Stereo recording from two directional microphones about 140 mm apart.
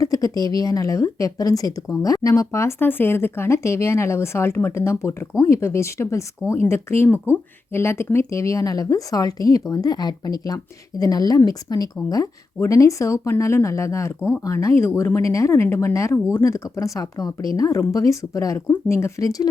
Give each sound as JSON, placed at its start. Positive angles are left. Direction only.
{"t": 0.0, "sound": "a woman's voice", "side_deg": 25}